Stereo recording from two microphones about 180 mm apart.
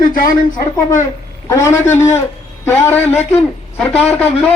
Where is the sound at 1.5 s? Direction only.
15° left (ahead or behind).